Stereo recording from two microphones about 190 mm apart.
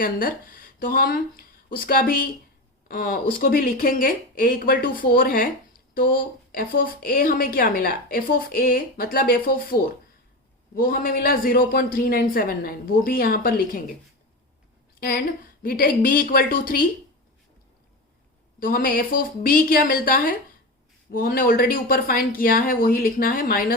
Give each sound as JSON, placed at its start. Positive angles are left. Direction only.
{"t": 0.0, "sound": "a woman's voice", "side_deg": 50}
{"t": 15.0, "sound": "a woman's voice", "side_deg": 50}
{"t": 18.6, "sound": "a woman's voice", "side_deg": 50}